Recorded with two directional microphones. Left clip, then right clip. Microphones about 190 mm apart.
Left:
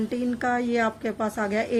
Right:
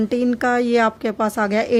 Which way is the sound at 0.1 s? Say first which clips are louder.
Right 7 dB; 55° right (ahead or behind).